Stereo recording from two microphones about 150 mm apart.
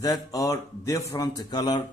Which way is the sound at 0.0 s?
25° left (ahead or behind).